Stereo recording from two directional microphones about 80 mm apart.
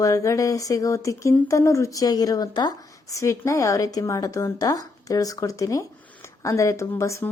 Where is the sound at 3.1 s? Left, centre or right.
Left.